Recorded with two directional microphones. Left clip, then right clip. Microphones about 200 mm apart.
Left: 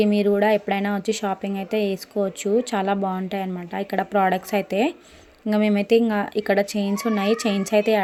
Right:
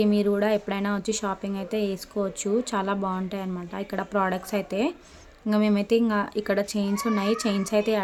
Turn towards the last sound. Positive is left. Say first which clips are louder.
# left 5 dB
turn(degrees=10)  # may be behind; listen again after turning